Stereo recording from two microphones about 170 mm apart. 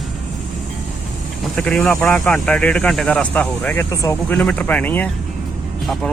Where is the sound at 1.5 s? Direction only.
5° left (ahead or behind).